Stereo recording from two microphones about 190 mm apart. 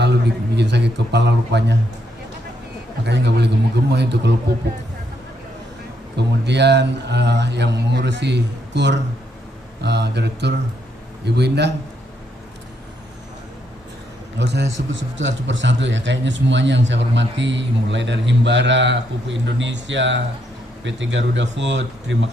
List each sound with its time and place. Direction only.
0.0 s a man's voice: 65° right (ahead or behind)
3.0 s a man's voice: 65° right (ahead or behind)
6.1 s a man's voice: 65° right (ahead or behind)
14.3 s a man's voice: 65° right (ahead or behind)